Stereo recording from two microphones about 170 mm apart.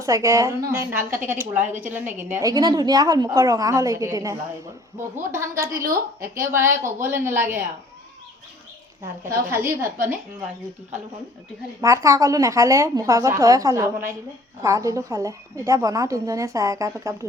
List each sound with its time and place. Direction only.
0.0 s a woman's voice: 20° right (ahead or behind)
1.6 s a woman's voice: 45° right (ahead or behind)
1.9 s a woman's voice: 10° right (ahead or behind)
9.5 s a woman's voice: 15° right (ahead or behind)
11.8 s a woman's voice: 15° right (ahead or behind)